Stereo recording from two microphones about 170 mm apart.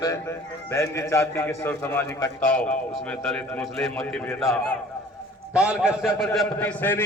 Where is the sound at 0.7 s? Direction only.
15° left (ahead or behind).